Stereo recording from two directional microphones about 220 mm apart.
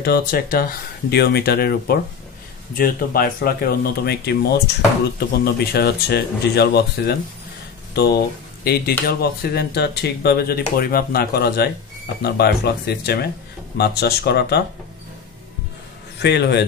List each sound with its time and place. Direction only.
0.0 s speech: 45° left (ahead or behind)
16.2 s speech: 50° left (ahead or behind)